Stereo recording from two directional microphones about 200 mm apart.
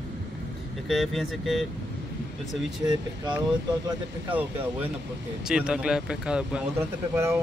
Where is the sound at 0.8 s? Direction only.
Centre (ahead or behind).